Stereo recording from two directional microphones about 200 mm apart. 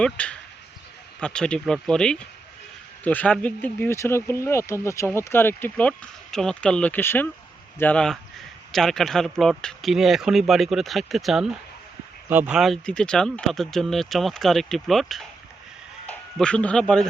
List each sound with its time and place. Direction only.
0.0 s speech: 5° left (ahead or behind)